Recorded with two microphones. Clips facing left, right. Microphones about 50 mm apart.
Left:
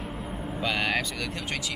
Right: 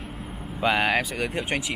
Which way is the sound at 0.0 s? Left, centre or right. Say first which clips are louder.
Left 2 dB; centre.